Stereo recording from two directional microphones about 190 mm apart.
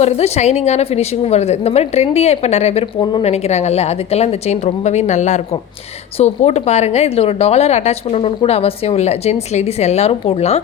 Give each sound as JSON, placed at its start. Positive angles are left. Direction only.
{"t": 0.0, "sound": "a woman's voice", "side_deg": 35}